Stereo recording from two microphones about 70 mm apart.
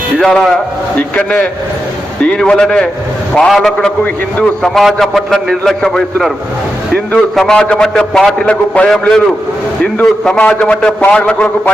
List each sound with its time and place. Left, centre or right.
0.2 s a man's voice: centre
3.4 s a man's voice: centre
3.8 s a man's voice: centre
4.6 s a man's voice: centre
7.3 s a man's voice: centre
8.9 s a man's voice: centre
10.2 s a man's voice: centre